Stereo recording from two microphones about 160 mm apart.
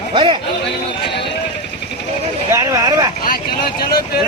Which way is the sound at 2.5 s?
20° right (ahead or behind).